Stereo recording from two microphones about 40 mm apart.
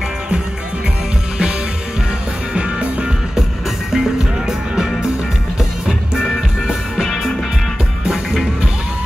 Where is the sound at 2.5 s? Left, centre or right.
Right.